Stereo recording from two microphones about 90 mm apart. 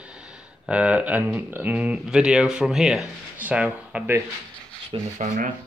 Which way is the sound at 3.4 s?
15° right (ahead or behind).